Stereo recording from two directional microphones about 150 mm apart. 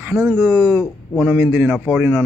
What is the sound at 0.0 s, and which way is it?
Speech, 10° right (ahead or behind).